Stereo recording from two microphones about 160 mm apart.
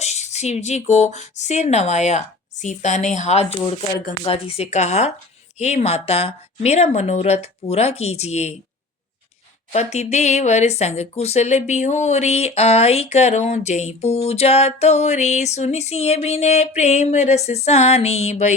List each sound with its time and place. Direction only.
0.0 s speech: 45° left (ahead or behind)
4.2 s speech: 35° left (ahead or behind)
9.7 s speech: 45° left (ahead or behind)